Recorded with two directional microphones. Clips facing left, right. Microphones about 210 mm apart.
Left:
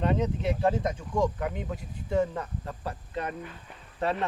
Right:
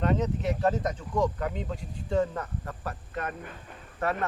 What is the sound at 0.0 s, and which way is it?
Speech, 10° left (ahead or behind).